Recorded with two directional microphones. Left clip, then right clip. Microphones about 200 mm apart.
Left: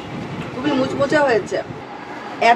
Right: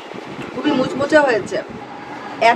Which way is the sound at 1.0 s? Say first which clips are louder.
Right 4 dB; 25° right (ahead or behind).